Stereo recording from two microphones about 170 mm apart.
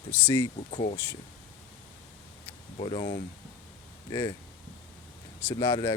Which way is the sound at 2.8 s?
30° left (ahead or behind).